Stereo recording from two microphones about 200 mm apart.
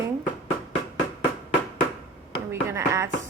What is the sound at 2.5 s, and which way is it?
Speech, 15° right (ahead or behind).